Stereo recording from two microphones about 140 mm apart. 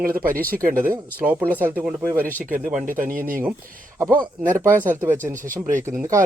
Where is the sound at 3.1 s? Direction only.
80° right.